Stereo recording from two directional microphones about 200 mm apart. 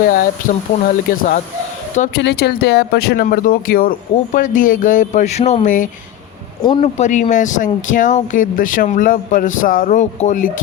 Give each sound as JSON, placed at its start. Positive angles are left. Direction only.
{"t": 0.0, "sound": "speech", "side_deg": 45}